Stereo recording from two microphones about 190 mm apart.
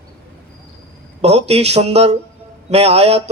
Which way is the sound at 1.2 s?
35° right (ahead or behind).